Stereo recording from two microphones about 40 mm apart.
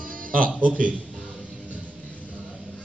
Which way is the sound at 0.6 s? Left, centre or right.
Right.